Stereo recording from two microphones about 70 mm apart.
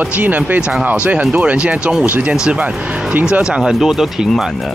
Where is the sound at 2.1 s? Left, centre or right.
Right.